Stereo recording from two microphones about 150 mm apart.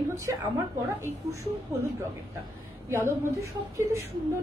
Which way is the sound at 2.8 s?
15° right (ahead or behind).